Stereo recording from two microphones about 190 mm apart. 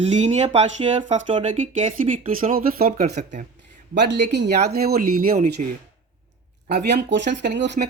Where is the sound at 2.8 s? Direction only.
40° right (ahead or behind).